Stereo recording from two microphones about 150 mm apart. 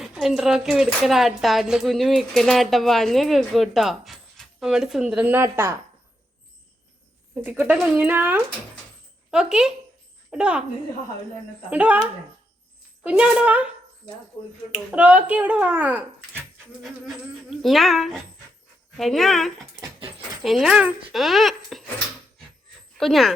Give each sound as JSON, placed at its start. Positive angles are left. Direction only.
{"t": 0.0, "sound": "a woman's voice", "side_deg": -5}
{"t": 7.4, "sound": "a child's voice", "side_deg": -10}
{"t": 11.7, "sound": "a child's voice", "side_deg": -10}
{"t": 14.9, "sound": "a child's voice", "side_deg": -10}
{"t": 20.0, "sound": "dog", "side_deg": -40}
{"t": 20.4, "sound": "a woman's voice", "side_deg": 0}